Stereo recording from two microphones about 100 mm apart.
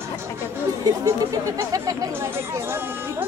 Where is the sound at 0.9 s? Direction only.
35° right (ahead or behind).